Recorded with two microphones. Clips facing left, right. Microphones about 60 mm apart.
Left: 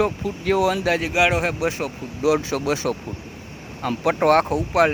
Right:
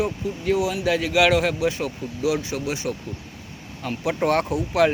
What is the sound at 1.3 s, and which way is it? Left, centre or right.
Speech, left.